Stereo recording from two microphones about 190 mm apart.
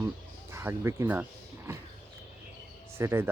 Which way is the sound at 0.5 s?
15° right (ahead or behind).